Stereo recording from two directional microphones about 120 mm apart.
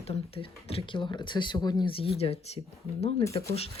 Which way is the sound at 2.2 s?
60° left (ahead or behind).